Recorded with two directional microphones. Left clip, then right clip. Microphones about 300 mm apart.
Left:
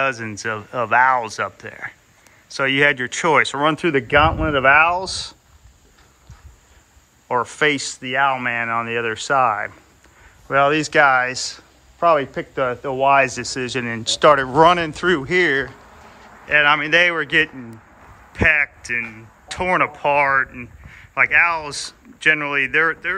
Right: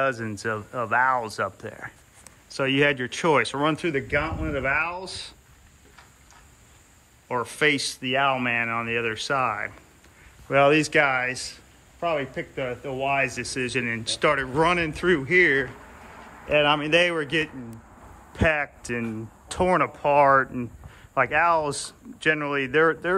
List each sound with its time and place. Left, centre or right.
0.0 s speech: centre
7.2 s speech: centre
12.4 s a man's voice: left
13.0 s speech: centre
16.4 s speech: centre